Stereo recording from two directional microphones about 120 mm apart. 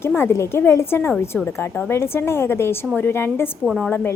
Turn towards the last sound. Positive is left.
turn(degrees=0)  # may be behind; listen again after turning